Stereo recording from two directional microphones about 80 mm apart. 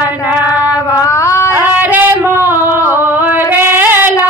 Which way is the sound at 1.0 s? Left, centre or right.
Left.